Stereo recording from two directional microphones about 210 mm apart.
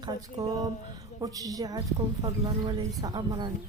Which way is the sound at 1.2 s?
15° right (ahead or behind).